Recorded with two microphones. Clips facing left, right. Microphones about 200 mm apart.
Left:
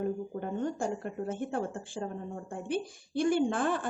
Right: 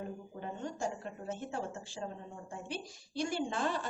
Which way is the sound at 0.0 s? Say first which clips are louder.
Left 9 dB; 55° left (ahead or behind).